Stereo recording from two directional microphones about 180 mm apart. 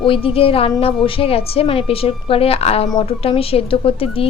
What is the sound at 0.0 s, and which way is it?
A woman's voice, 30° left (ahead or behind).